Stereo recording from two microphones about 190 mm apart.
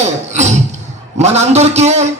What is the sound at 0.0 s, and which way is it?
Cough, 35° right (ahead or behind).